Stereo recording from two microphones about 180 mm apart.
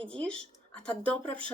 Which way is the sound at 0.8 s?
5° left (ahead or behind).